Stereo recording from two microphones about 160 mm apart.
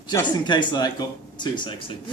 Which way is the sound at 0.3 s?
25° left (ahead or behind).